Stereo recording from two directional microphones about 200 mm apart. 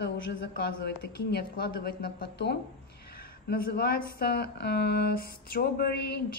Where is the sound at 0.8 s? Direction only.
55° left (ahead or behind).